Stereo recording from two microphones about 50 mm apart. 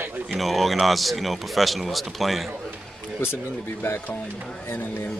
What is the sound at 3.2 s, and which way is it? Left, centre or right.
Speech, left.